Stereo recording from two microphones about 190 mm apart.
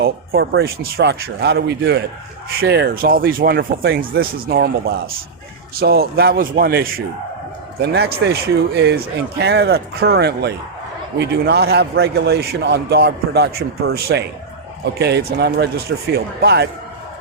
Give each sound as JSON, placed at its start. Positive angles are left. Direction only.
{"t": 0.0, "sound": "a sound", "side_deg": -55}
{"t": 0.6, "sound": "a man's voice", "side_deg": -55}
{"t": 9.4, "sound": "a man's voice", "side_deg": -60}